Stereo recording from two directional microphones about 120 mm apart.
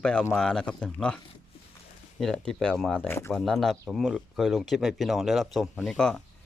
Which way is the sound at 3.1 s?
20° left (ahead or behind).